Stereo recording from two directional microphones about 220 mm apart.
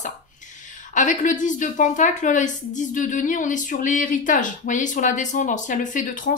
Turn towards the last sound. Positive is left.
turn(degrees=35)  # may be behind; listen again after turning